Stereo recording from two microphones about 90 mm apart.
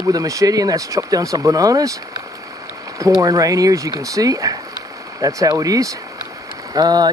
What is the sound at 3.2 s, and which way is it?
Speech, 40° right (ahead or behind).